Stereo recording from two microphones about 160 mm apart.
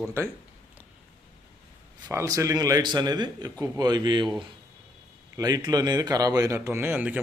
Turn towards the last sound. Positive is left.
turn(degrees=-10)  # may be behind; listen again after turning